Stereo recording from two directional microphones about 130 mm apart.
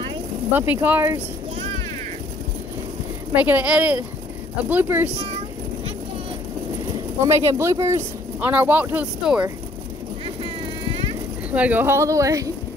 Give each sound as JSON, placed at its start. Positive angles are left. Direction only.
{"t": 0.5, "sound": "speech", "side_deg": -15}
{"t": 3.3, "sound": "speech", "side_deg": -15}
{"t": 7.2, "sound": "speech", "side_deg": -25}
{"t": 10.2, "sound": "vehicle", "side_deg": -45}
{"t": 11.5, "sound": "speech", "side_deg": -10}